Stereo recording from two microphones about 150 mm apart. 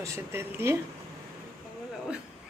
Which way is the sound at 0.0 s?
15° right (ahead or behind).